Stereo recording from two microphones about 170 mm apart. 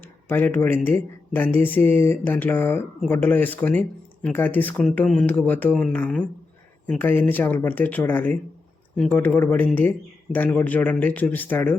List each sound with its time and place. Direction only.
0.3 s speech: 10° left (ahead or behind)